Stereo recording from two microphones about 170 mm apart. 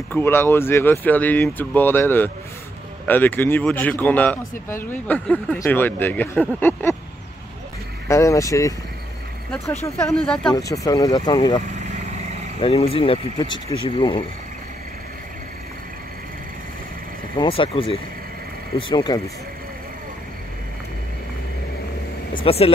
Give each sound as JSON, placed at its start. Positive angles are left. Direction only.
{"t": 0.1, "sound": "speech", "side_deg": 15}
{"t": 8.1, "sound": "speech", "side_deg": 15}
{"t": 10.2, "sound": "speech", "side_deg": 5}
{"t": 10.5, "sound": "speech", "side_deg": 20}
{"t": 17.4, "sound": "speech", "side_deg": 30}
{"t": 22.3, "sound": "speech", "side_deg": 35}